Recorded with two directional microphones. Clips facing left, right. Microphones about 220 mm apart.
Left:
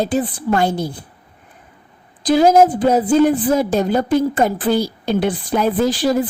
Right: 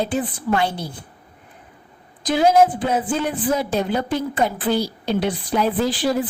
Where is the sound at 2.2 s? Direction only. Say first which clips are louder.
Left 4 dB; 40° left (ahead or behind).